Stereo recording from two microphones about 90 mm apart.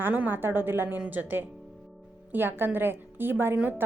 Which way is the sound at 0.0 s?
20° right (ahead or behind).